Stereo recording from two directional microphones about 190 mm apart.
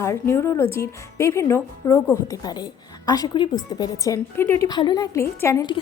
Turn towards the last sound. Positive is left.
turn(degrees=20)  # may be behind; listen again after turning